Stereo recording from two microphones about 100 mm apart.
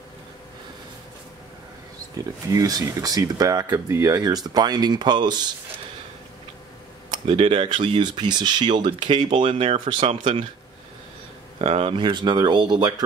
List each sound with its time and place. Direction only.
2.1 s speech: 35° right (ahead or behind)
7.2 s speech: 70° right (ahead or behind)
11.5 s speech: 80° right
12.0 s speech: 50° right (ahead or behind)